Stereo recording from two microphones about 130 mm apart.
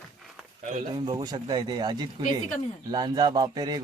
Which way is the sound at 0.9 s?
35° right (ahead or behind).